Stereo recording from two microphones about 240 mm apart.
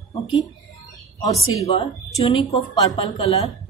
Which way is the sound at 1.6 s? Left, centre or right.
Left.